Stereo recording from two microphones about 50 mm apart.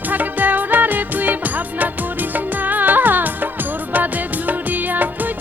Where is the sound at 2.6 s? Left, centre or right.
Right.